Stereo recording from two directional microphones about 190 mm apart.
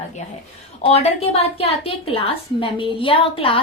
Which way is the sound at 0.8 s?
35° left (ahead or behind).